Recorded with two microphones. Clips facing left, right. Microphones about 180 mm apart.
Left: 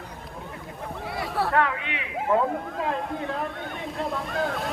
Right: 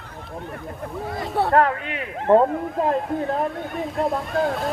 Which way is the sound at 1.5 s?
45° right (ahead or behind).